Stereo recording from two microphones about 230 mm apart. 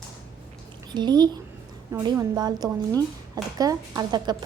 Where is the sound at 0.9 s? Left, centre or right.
Centre.